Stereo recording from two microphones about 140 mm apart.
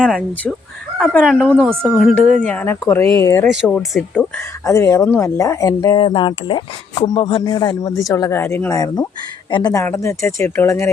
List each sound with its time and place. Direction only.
0.0 s speech: 5° left (ahead or behind)
1.7 s speech: 15° right (ahead or behind)
2.5 s speech: 15° left (ahead or behind)
3.4 s speech: 5° right (ahead or behind)
4.4 s speech: 20° left (ahead or behind)
6.0 s speech: 35° left (ahead or behind)
9.5 s speech: 35° left (ahead or behind)
9.7 s speech: 20° left (ahead or behind)